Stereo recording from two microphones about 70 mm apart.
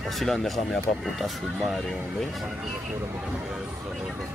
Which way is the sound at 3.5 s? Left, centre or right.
Centre.